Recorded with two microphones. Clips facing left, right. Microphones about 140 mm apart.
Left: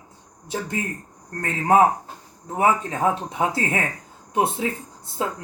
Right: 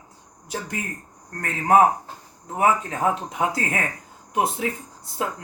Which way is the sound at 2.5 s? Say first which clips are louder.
Left 1 dB; 25° left (ahead or behind).